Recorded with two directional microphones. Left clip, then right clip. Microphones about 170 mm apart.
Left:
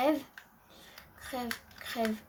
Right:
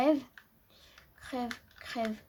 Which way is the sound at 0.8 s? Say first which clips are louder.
Left 3 dB; 35° right (ahead or behind).